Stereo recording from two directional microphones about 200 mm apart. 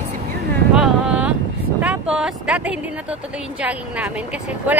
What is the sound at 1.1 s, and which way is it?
Vehicle, 5° right (ahead or behind).